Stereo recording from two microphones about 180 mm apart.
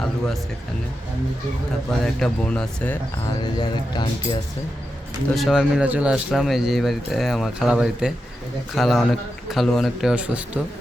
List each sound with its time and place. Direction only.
2.1 s speech: 5° left (ahead or behind)
3.4 s speech: 25° left (ahead or behind)
5.3 s speech: centre (ahead or behind)